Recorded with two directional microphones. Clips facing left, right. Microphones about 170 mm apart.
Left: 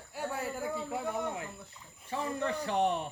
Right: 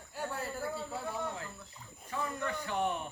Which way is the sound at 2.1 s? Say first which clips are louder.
Left 3 dB; 30° left (ahead or behind).